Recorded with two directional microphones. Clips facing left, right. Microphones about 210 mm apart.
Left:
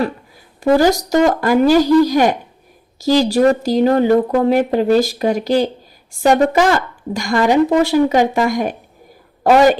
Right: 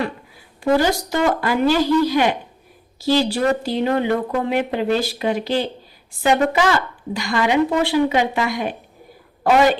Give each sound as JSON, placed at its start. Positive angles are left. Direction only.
{"t": 0.6, "sound": "a woman's voice", "side_deg": 40}